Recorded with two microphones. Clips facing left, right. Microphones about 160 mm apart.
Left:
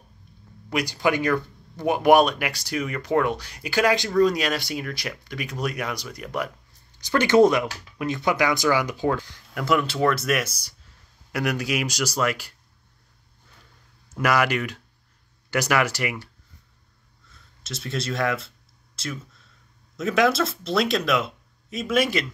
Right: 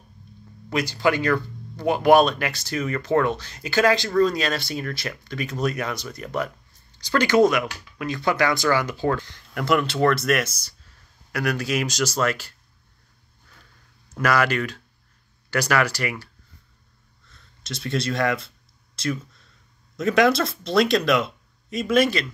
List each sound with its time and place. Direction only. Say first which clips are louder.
0.7 s speech: right 1 dB; 10° left (ahead or behind)
7.1 s speech: left 1 dB; 25° left (ahead or behind)
14.1 s speech: right 1 dB; 15° left (ahead or behind)
17.6 s speech: right 3 dB; 5° left (ahead or behind)